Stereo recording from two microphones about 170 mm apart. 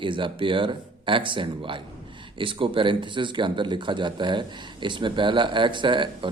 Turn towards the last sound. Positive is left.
turn(degrees=-30)  # may be behind; listen again after turning